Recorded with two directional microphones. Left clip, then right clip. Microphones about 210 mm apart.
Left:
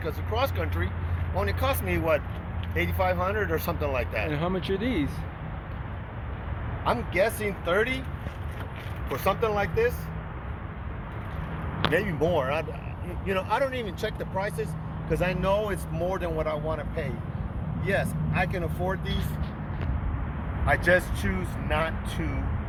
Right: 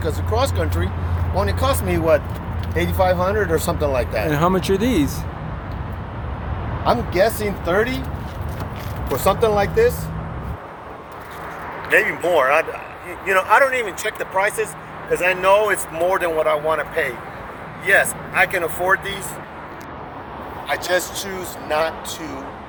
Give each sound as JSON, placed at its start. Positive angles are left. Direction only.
{"t": 0.0, "sound": "speech", "side_deg": -5}
{"t": 7.1, "sound": "speech", "side_deg": 20}
{"t": 9.1, "sound": "speech", "side_deg": 0}
{"t": 11.9, "sound": "speech", "side_deg": 5}
{"t": 20.7, "sound": "speech", "side_deg": -5}